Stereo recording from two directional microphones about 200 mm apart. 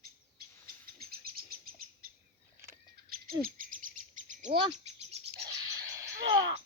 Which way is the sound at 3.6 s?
45° right (ahead or behind).